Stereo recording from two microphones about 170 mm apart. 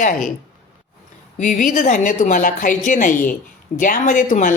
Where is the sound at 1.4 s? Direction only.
50° left (ahead or behind).